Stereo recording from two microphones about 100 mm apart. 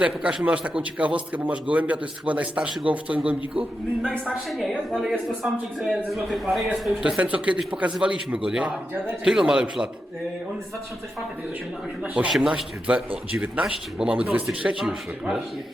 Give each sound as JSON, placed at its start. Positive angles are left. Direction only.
{"t": 0.0, "sound": "a man's voice", "side_deg": -10}
{"t": 4.3, "sound": "a man's voice", "side_deg": 0}
{"t": 7.0, "sound": "a man's voice", "side_deg": -10}
{"t": 12.3, "sound": "a man's voice", "side_deg": -5}